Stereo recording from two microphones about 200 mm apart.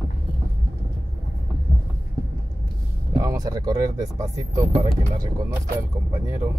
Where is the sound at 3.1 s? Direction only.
20° right (ahead or behind).